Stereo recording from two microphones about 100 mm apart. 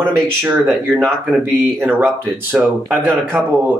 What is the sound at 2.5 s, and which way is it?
Speech, 5° right (ahead or behind).